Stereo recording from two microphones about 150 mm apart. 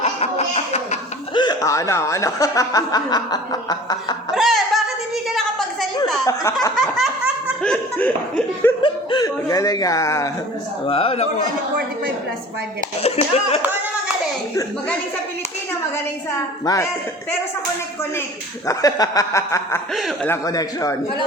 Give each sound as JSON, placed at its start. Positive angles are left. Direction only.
{"t": 0.0, "sound": "a sound", "side_deg": 45}
{"t": 1.3, "sound": "speech", "side_deg": 30}
{"t": 4.4, "sound": "music", "side_deg": 0}
{"t": 5.3, "sound": "a sound", "side_deg": 0}
{"t": 6.2, "sound": "speech", "side_deg": 20}
{"t": 6.7, "sound": "snicker", "side_deg": 0}
{"t": 7.6, "sound": "speech", "side_deg": 10}
{"t": 8.8, "sound": "speech", "side_deg": 30}
{"t": 10.8, "sound": "a man's voice", "side_deg": 40}
{"t": 13.0, "sound": "speech", "side_deg": 45}
{"t": 16.3, "sound": "speech", "side_deg": 20}
{"t": 18.7, "sound": "speech", "side_deg": 25}
{"t": 19.9, "sound": "speech", "side_deg": 0}
{"t": 20.2, "sound": "speech", "side_deg": 20}